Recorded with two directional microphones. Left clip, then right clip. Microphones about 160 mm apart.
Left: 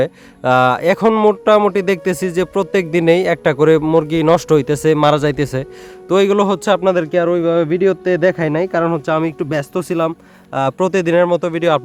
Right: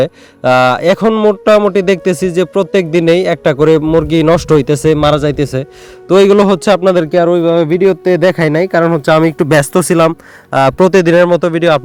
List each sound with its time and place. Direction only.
0.0 s a man's voice: 25° right (ahead or behind)
6.1 s a man's voice: 30° right (ahead or behind)
9.0 s speech: 45° right (ahead or behind)
9.5 s a man's voice: 60° right (ahead or behind); by 11.8 s 25° right (ahead or behind)